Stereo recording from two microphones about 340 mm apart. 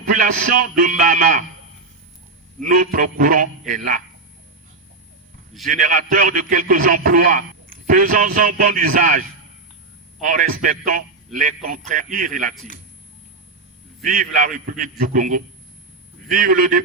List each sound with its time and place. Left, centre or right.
0.1 s speech: right
2.6 s speech: right
5.7 s speech: right
10.2 s speech: right
14.0 s speech: right